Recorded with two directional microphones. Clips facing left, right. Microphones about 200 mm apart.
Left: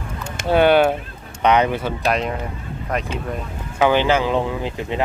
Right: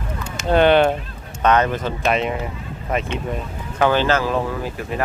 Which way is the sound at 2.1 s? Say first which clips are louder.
Right 2 dB; centre (ahead or behind).